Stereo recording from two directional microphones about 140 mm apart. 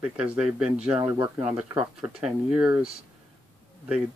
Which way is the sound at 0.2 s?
5° right (ahead or behind).